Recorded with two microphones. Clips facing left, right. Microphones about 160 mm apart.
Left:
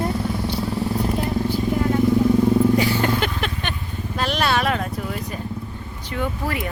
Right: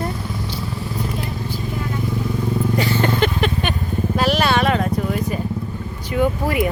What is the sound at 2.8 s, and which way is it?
Vehicle, 10° left (ahead or behind).